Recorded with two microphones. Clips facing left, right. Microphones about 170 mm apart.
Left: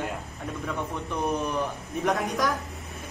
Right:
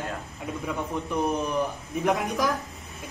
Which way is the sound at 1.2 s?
Centre (ahead or behind).